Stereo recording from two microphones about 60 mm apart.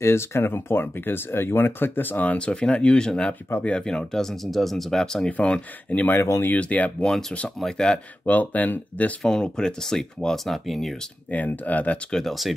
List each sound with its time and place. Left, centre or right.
0.0 s speech: left
2.3 s speech: centre
6.1 s speech: left
6.6 s speech: left
7.1 s speech: centre
8.3 s speech: left
9.2 s speech: centre
11.3 s speech: left
12.1 s speech: centre